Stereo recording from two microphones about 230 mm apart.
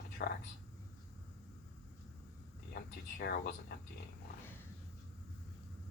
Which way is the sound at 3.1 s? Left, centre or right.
Left.